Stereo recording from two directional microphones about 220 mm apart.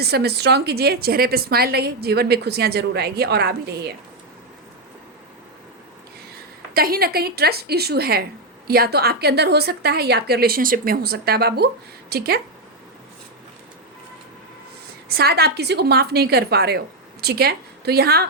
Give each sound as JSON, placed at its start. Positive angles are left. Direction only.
{"t": 0.0, "sound": "a woman's voice", "side_deg": -45}
{"t": 6.7, "sound": "a woman's voice", "side_deg": -45}
{"t": 15.1, "sound": "a woman's voice", "side_deg": -45}